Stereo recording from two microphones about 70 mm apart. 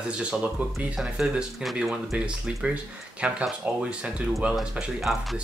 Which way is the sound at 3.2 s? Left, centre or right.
Centre.